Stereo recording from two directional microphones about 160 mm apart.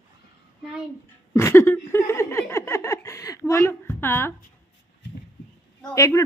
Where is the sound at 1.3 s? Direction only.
15° left (ahead or behind).